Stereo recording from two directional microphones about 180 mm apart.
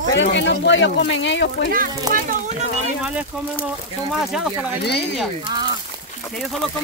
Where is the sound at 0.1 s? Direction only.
80° left.